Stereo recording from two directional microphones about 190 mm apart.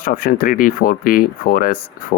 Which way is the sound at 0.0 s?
50° left (ahead or behind).